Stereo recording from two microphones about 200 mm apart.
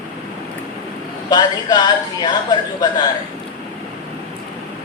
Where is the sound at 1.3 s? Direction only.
20° left (ahead or behind).